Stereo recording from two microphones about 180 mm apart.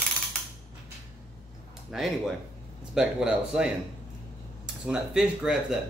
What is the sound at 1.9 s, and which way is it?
A man's voice, centre (ahead or behind).